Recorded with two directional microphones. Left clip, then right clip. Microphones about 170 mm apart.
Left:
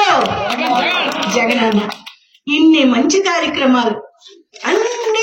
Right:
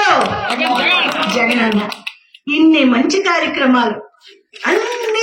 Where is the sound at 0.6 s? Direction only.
65° left (ahead or behind).